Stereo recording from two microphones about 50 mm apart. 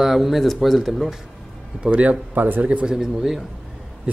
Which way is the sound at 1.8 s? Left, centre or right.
Right.